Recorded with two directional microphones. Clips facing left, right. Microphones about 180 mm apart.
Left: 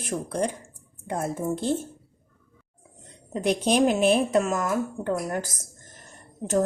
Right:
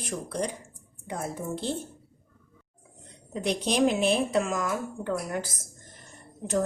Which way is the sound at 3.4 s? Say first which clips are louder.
Left 3 dB; 50° left (ahead or behind).